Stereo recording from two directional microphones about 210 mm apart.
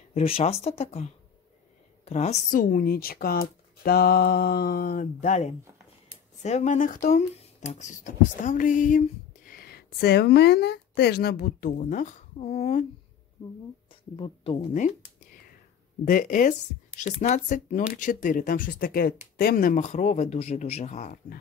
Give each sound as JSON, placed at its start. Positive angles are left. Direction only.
{"t": 0.1, "sound": "speech", "side_deg": 25}
{"t": 14.1, "sound": "speech", "side_deg": 25}
{"t": 16.1, "sound": "speech", "side_deg": 40}